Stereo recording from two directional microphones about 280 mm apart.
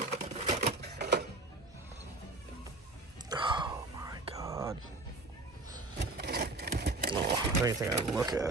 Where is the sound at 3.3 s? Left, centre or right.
Centre.